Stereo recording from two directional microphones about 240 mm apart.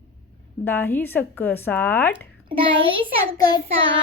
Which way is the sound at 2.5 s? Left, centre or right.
Right.